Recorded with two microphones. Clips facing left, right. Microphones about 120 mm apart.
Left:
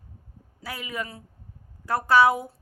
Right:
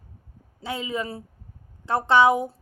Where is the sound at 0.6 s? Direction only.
25° right (ahead or behind).